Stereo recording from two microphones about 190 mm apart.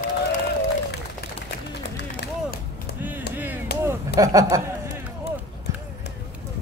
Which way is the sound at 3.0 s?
10° right (ahead or behind).